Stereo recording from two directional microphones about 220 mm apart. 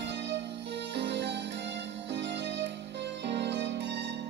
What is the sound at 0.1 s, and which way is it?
Music, 50° right (ahead or behind).